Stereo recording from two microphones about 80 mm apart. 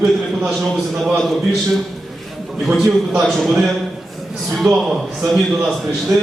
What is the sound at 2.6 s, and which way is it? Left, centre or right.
A man's voice, centre.